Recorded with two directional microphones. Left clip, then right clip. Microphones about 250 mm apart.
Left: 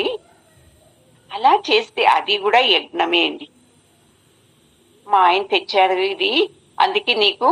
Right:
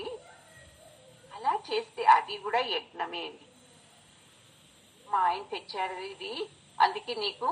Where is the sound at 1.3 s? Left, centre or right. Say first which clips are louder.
Left 15 dB; left.